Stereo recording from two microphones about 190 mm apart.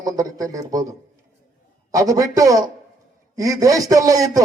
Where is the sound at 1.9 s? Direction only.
20° right (ahead or behind).